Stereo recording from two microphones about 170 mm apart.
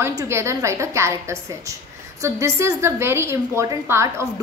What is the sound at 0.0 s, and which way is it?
A woman's voice, 15° right (ahead or behind).